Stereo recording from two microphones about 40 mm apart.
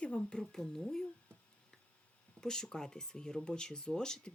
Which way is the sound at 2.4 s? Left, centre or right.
Centre.